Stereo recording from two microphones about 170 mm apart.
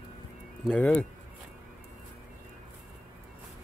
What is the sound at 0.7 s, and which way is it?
Speech, 10° left (ahead or behind).